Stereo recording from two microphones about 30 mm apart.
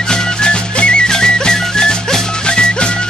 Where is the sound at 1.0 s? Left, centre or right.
Left.